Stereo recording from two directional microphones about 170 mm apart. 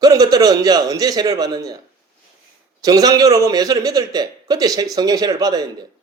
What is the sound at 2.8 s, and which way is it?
A man's voice, 20° right (ahead or behind).